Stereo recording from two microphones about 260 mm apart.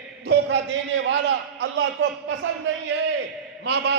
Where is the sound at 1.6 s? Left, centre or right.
Right.